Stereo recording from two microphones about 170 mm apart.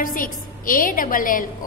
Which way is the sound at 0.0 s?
55° left (ahead or behind).